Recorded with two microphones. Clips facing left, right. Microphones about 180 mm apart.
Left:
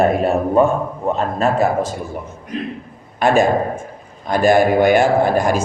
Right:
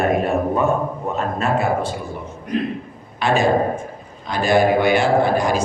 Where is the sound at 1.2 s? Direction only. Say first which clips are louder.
Left 3 dB; 35° left (ahead or behind).